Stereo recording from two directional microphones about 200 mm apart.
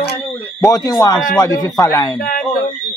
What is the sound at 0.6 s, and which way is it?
Speech, 20° left (ahead or behind).